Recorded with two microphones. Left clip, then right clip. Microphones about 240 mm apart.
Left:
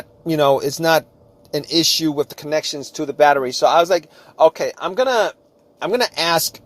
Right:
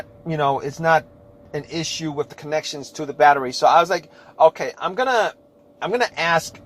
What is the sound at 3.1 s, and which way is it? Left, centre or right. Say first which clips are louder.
A man's voice: left 1 dB; left.